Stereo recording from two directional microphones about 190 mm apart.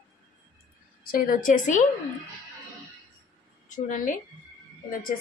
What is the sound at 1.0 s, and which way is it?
Speech, 50° left (ahead or behind).